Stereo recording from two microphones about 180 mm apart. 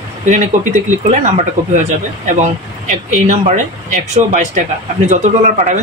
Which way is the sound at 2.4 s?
40° right (ahead or behind).